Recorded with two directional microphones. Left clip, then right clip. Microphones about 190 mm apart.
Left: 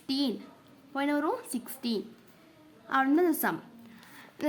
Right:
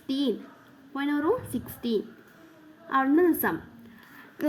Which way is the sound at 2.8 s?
10° left (ahead or behind).